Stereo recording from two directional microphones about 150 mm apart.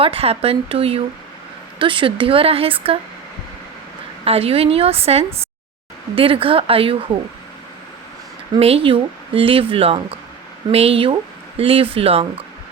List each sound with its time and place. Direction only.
0.0 s speech: 40° right (ahead or behind)
4.3 s speech: 40° right (ahead or behind)
8.5 s speech: 40° right (ahead or behind)